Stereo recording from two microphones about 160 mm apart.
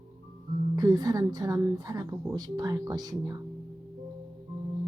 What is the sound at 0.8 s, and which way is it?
Speech, 25° right (ahead or behind).